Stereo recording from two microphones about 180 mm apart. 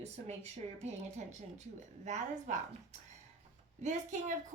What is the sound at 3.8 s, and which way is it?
Speech, 40° right (ahead or behind).